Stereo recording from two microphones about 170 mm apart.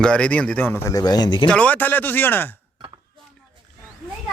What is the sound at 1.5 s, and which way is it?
A man's voice, 5° left (ahead or behind).